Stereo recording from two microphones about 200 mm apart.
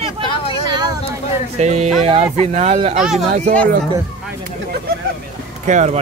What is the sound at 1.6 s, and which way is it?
Speech, 35° right (ahead or behind).